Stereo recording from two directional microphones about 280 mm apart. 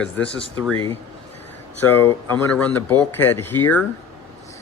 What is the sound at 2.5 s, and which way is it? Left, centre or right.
Speech, centre.